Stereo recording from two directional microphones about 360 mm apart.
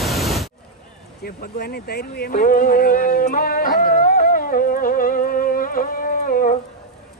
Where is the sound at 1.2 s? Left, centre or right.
Left.